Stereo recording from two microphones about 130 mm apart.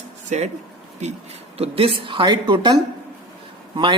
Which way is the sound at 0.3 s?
60° right (ahead or behind).